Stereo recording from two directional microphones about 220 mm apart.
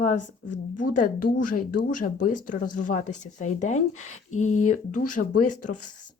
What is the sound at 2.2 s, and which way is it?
Speech, 35° left (ahead or behind).